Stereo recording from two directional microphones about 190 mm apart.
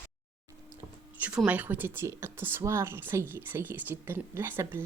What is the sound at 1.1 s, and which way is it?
Speech, 5° right (ahead or behind).